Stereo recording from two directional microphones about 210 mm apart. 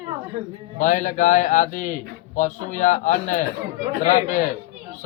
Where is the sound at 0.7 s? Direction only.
35° left (ahead or behind).